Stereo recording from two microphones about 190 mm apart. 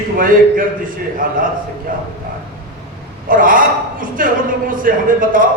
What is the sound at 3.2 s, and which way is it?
A man's voice, 45° right (ahead or behind).